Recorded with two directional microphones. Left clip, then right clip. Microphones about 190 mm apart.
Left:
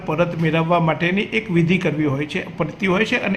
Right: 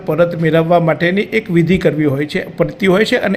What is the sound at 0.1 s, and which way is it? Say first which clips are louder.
A man's voice: right 7 dB; 20° right (ahead or behind).